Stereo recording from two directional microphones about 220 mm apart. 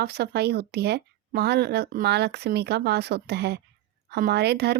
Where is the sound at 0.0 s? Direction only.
45° right (ahead or behind).